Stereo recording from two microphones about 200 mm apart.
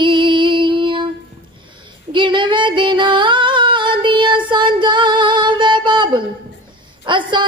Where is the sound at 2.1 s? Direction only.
25° right (ahead or behind).